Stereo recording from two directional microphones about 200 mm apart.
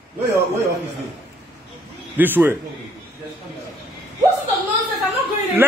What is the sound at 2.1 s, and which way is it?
Speech, 10° right (ahead or behind).